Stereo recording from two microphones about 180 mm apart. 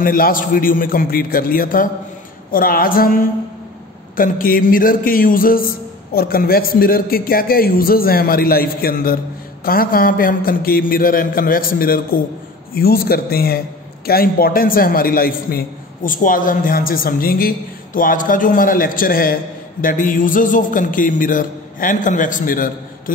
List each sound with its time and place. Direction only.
0.0 s a man's voice: 50° left (ahead or behind)
4.2 s a man's voice: 50° left (ahead or behind)